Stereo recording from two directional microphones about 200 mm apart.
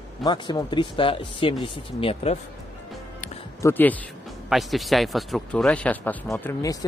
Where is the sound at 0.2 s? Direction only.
20° left (ahead or behind).